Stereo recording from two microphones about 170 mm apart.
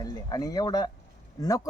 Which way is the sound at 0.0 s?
25° left (ahead or behind).